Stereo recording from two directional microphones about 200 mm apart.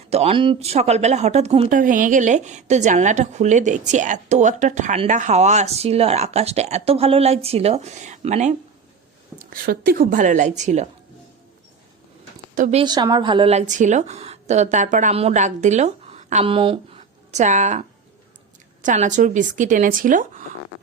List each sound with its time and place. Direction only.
0.1 s a woman's voice: 30° right (ahead or behind)
1.7 s a woman's voice: 40° right (ahead or behind)
9.4 s a woman's voice: 45° right (ahead or behind)
12.5 s a woman's voice: 40° right (ahead or behind)
12.8 s a woman's voice: 20° right (ahead or behind); by 20.4 s 40° right (ahead or behind)